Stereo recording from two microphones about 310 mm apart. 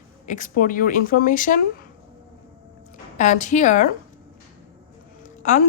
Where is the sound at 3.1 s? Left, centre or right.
Left.